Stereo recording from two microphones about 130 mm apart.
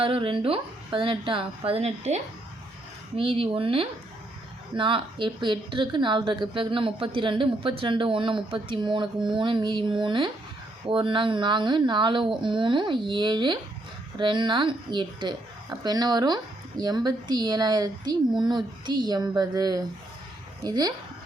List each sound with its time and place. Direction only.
0.0 s a woman's voice: 45° right (ahead or behind)
3.2 s a woman's voice: 45° right (ahead or behind)